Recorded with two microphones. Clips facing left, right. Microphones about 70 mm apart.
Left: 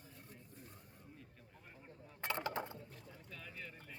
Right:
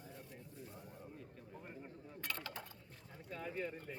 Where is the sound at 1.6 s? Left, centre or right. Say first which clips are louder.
Right 5 dB; right.